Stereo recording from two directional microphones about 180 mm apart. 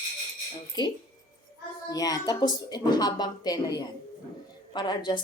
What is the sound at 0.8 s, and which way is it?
A woman's voice, 25° left (ahead or behind).